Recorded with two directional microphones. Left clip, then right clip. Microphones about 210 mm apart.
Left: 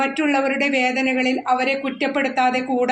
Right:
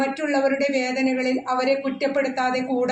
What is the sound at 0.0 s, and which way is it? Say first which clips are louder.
A man's voice: left 2 dB; 35° left (ahead or behind).